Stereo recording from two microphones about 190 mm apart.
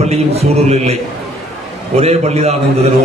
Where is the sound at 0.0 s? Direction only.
35° right (ahead or behind).